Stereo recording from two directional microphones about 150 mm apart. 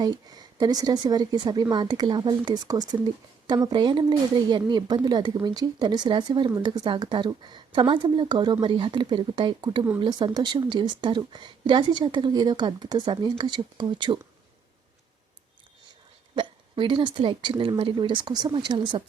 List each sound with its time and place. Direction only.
0.0 s speech: 25° right (ahead or behind)
16.3 s speech: 30° right (ahead or behind)